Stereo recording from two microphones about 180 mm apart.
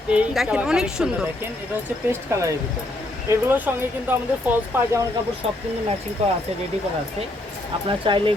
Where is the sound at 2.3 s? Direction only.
15° right (ahead or behind).